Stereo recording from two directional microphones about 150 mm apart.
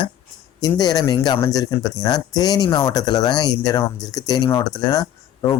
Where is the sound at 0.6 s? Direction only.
25° left (ahead or behind).